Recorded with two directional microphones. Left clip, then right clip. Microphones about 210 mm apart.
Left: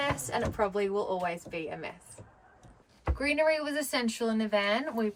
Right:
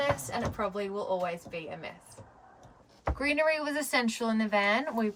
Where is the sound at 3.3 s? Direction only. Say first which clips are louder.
Left 2 dB; 40° right (ahead or behind).